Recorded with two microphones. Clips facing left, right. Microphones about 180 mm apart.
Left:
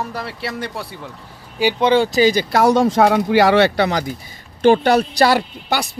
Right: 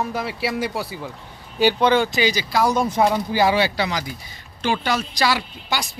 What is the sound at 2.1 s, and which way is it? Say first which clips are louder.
Speech: left 7 dB; 45° left (ahead or behind).